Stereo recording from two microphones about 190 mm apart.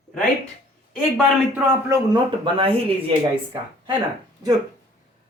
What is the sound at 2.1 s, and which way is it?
Speech, 25° right (ahead or behind).